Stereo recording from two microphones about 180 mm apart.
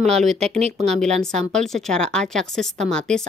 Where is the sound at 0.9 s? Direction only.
5° left (ahead or behind).